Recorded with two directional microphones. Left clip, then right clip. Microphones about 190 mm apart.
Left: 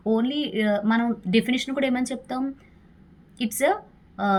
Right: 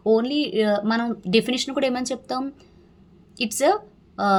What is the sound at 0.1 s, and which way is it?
Speech, 25° right (ahead or behind).